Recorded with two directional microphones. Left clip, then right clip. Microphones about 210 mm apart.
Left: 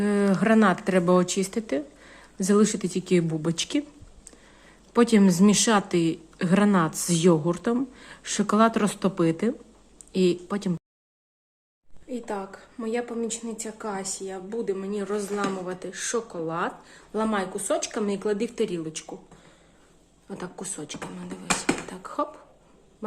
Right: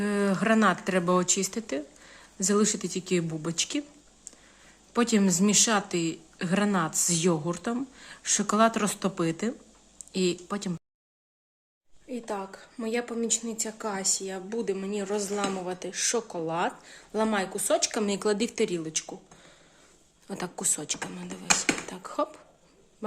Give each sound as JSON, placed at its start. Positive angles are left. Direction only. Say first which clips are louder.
{"t": 0.0, "sound": "speech", "louder": "left 3 dB", "side_deg": 0}
{"t": 12.0, "sound": "speech", "louder": "left 2 dB", "side_deg": -10}
{"t": 20.2, "sound": "speech", "louder": "right 4 dB", "side_deg": -25}
{"t": 21.8, "sound": "beatboxing", "louder": "left 1 dB", "side_deg": -10}